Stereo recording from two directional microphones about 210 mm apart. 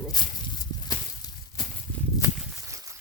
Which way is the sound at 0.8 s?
20° left (ahead or behind).